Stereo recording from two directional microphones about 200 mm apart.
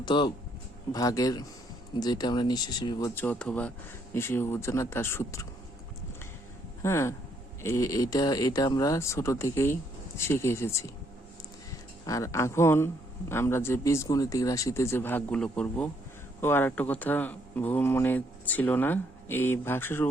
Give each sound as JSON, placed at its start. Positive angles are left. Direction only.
{"t": 0.0, "sound": "a man's voice", "side_deg": 25}
{"t": 3.2, "sound": "a man's voice", "side_deg": 5}
{"t": 6.8, "sound": "a man's voice", "side_deg": 15}
{"t": 12.0, "sound": "a man's voice", "side_deg": 15}